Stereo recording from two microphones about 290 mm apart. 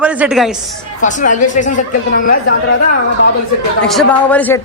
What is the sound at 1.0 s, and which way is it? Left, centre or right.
A woman's voice, left.